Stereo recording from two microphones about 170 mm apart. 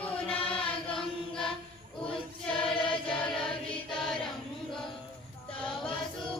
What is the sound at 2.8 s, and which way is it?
Choir, 30° left (ahead or behind).